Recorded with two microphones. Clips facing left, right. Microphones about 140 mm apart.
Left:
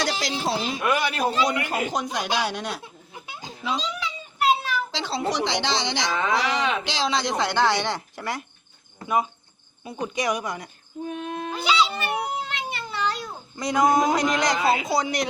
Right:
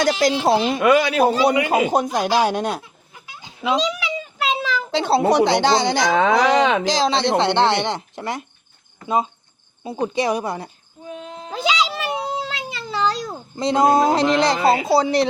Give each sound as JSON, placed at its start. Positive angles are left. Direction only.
{"t": 0.0, "sound": "a woman's voice", "side_deg": -50}
{"t": 0.8, "sound": "speech", "side_deg": -90}
{"t": 2.4, "sound": "a woman's voice", "side_deg": -50}
{"t": 3.6, "sound": "a sound", "side_deg": -90}
{"t": 4.9, "sound": "a woman's voice", "side_deg": -60}
{"t": 6.1, "sound": "speech", "side_deg": -90}
{"t": 6.8, "sound": "speech", "side_deg": -40}
{"t": 9.0, "sound": "cricket", "side_deg": -25}
{"t": 9.8, "sound": "a man's voice", "side_deg": -30}
{"t": 11.1, "sound": "a sound", "side_deg": 60}
{"t": 11.5, "sound": "meow", "side_deg": -90}
{"t": 13.6, "sound": "a man's voice", "side_deg": -25}